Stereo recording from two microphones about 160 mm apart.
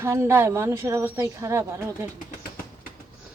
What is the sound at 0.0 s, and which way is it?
A woman's voice, 15° right (ahead or behind).